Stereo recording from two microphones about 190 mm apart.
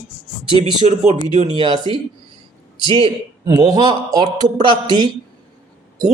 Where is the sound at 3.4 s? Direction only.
20° right (ahead or behind).